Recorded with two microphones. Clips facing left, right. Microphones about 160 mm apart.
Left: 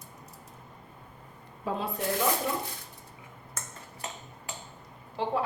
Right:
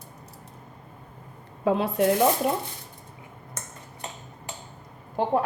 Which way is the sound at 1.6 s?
80° right.